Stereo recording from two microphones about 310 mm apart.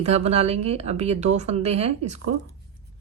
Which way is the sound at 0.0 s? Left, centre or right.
Centre.